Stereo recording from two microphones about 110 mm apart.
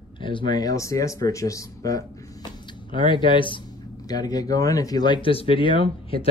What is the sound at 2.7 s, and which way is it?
Speech, 45° left (ahead or behind).